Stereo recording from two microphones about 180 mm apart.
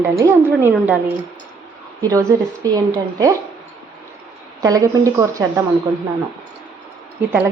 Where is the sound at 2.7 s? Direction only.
20° right (ahead or behind).